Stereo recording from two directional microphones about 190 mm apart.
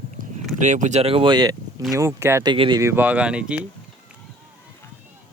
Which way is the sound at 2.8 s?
10° right (ahead or behind).